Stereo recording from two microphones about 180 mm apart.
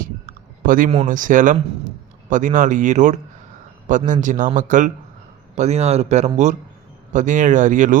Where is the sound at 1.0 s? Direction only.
45° right (ahead or behind).